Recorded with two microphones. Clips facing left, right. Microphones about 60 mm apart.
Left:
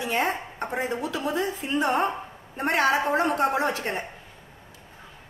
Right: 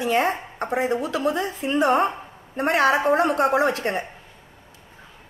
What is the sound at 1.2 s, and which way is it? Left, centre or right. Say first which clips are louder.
A woman's voice: right 3 dB; right.